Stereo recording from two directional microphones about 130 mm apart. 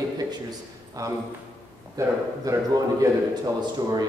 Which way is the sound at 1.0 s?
30° right (ahead or behind).